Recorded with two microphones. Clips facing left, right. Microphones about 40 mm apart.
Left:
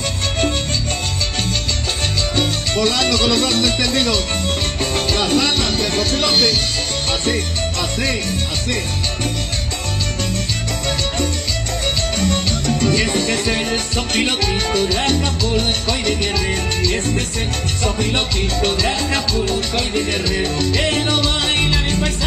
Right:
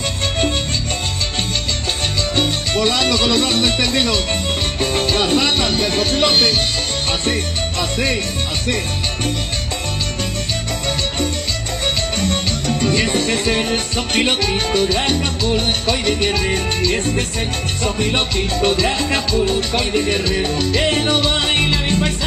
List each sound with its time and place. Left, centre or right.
2.3 s speech: centre
4.7 s music: centre
8.6 s speech: centre
12.8 s music: centre